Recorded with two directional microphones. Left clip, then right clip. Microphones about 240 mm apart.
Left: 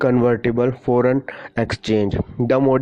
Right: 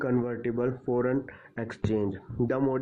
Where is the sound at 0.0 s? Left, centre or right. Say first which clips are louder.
Left 13 dB; left.